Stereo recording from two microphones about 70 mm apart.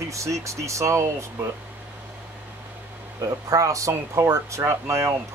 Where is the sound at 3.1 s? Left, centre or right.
Right.